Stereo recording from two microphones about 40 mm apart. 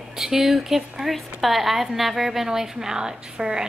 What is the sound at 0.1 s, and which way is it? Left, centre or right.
A woman's voice, centre.